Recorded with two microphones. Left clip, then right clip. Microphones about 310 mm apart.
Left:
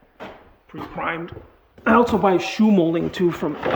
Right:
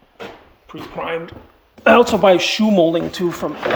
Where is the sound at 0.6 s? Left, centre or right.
Centre.